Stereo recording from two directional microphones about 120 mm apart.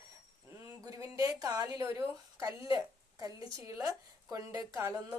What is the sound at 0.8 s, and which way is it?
A woman's voice, 30° right (ahead or behind).